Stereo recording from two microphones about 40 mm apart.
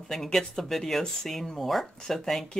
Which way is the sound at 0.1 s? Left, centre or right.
Centre.